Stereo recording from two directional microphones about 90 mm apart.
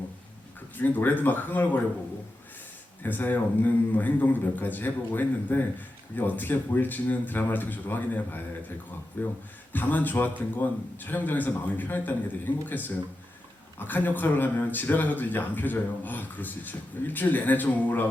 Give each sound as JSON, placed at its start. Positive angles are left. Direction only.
{"t": 0.8, "sound": "speech", "side_deg": 20}
{"t": 3.0, "sound": "speech", "side_deg": 20}
{"t": 13.7, "sound": "speech", "side_deg": 20}